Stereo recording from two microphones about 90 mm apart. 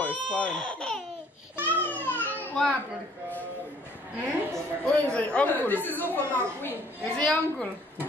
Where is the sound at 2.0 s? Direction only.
20° left (ahead or behind).